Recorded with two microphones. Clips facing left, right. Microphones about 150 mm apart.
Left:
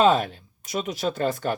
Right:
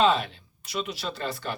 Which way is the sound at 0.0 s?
45° left (ahead or behind).